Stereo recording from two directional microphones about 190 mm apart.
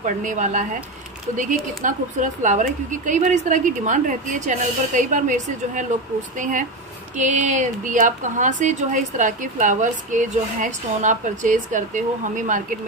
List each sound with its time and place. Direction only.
0.0 s a woman's voice: 40° right (ahead or behind)